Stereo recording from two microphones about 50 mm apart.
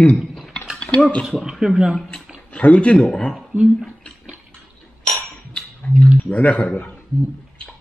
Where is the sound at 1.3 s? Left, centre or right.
Centre.